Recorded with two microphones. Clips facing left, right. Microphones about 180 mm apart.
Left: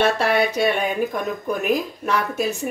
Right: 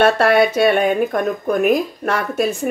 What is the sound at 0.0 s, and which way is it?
Speech, 65° right (ahead or behind).